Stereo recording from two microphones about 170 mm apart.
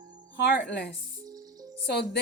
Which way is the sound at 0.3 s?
85° left.